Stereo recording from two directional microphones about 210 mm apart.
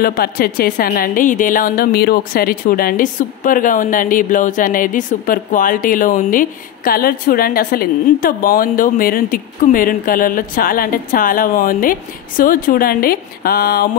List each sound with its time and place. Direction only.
0.0 s speech: 45° left (ahead or behind)